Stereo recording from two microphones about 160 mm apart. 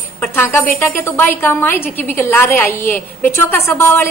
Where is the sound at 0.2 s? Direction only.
15° left (ahead or behind).